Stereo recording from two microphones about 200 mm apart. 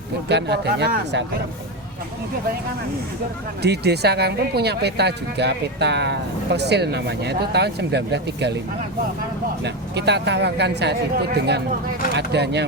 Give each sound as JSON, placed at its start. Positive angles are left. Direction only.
{"t": 0.3, "sound": "speech", "side_deg": -55}
{"t": 3.6, "sound": "speech", "side_deg": -55}
{"t": 9.6, "sound": "speech", "side_deg": -60}